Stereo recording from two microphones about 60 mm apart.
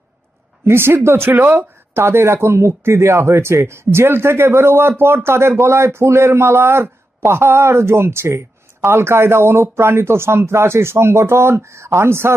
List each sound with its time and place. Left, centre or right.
0.6 s speech: right